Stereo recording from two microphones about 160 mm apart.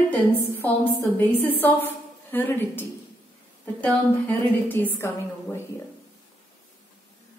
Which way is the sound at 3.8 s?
10° left (ahead or behind).